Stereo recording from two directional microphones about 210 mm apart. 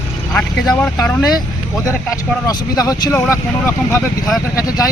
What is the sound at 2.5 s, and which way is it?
Speech, 15° left (ahead or behind).